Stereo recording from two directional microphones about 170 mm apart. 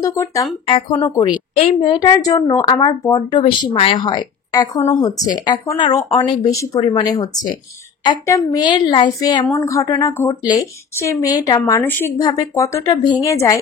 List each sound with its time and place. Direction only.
0.0 s speech: 20° left (ahead or behind)
0.7 s speech: 30° left (ahead or behind)
1.0 s speech: 20° left (ahead or behind)